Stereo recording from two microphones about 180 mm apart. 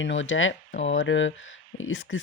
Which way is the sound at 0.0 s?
90° left.